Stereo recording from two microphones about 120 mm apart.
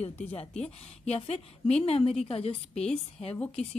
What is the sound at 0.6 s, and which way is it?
A woman's voice, 60° left (ahead or behind).